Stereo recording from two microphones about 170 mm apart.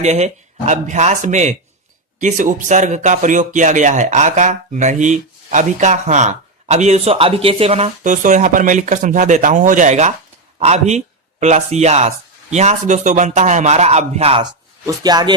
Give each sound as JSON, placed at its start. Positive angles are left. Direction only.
{"t": 0.0, "sound": "speech", "side_deg": -40}
{"t": 14.8, "sound": "speech", "side_deg": -25}